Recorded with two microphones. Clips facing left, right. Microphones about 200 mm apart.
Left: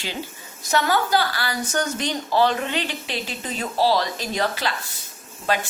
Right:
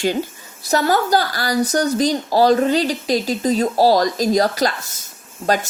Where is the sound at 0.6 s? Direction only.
35° right (ahead or behind).